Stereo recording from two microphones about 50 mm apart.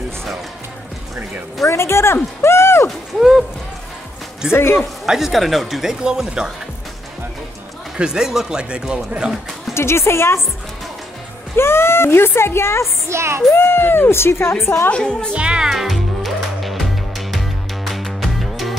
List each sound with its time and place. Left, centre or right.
1.6 s speech: left
2.4 s a sound: left
3.2 s speech: centre
4.5 s speech: left
5.0 s speech: centre
5.9 s speech: centre
8.0 s speech: centre
9.8 s speech: left
11.5 s speech: left
13.1 s music: right
13.6 s speech: left
14.9 s a woman's voice: centre
15.3 s speech: centre
15.7 s music: centre